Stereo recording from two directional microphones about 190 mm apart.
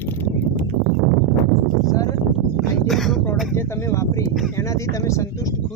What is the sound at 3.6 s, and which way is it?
Speech, 15° left (ahead or behind).